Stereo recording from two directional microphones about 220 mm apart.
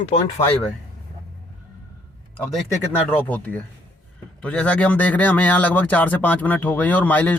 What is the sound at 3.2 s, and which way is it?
A man's voice, 5° left (ahead or behind).